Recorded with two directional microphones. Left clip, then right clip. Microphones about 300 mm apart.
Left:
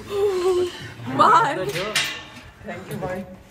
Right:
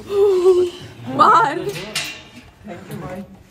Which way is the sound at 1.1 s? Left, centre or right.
Centre.